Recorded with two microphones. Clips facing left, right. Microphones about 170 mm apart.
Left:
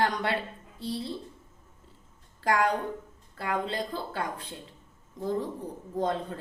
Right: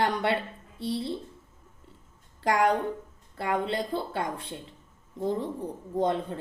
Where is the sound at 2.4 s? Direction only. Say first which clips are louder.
Right 2 dB; 25° right (ahead or behind).